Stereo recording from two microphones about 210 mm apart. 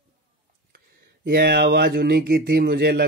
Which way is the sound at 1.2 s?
50° right (ahead or behind).